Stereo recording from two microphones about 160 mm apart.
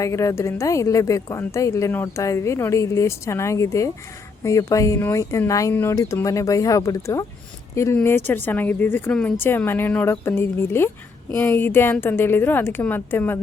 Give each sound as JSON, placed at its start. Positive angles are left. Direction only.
{"t": 0.0, "sound": "a woman's voice", "side_deg": 20}